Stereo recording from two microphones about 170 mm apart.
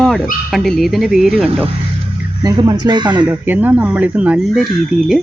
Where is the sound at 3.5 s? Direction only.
10° right (ahead or behind).